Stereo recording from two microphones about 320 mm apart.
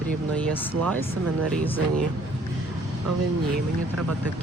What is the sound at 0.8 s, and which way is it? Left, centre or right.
Speech, centre.